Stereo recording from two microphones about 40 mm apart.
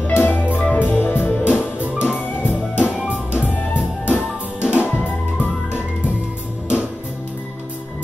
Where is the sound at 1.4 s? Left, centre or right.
Right.